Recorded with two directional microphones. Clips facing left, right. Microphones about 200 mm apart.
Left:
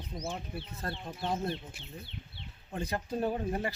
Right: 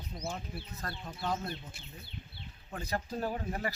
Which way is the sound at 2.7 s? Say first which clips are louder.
Left 2 dB; 25° left (ahead or behind).